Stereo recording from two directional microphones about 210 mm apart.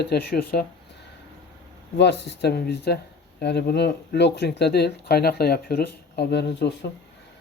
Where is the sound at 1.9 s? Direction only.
55° left (ahead or behind).